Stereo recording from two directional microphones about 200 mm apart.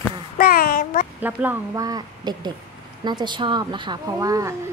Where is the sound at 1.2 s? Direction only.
10° right (ahead or behind).